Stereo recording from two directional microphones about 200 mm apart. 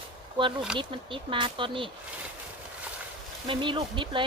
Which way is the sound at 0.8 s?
25° right (ahead or behind).